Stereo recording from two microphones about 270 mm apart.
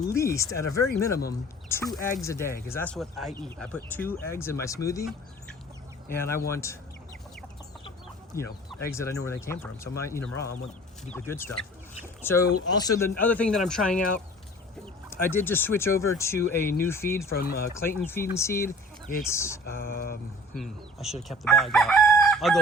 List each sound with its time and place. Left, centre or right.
0.0 s speech: centre
6.1 s speech: centre
8.3 s speech: centre
15.1 s speech: centre
19.6 s speech: left
20.6 s speech: centre
21.2 s chicken: centre